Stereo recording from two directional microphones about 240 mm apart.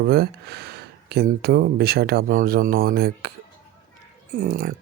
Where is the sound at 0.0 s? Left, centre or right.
Right.